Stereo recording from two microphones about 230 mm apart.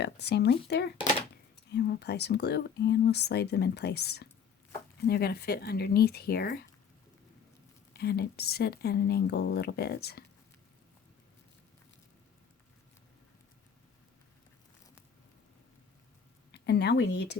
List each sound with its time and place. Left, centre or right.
0.0 s speech: left
7.9 s speech: left
16.5 s speech: left